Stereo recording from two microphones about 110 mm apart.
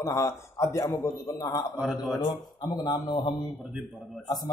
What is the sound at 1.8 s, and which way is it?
Speech, 5° right (ahead or behind).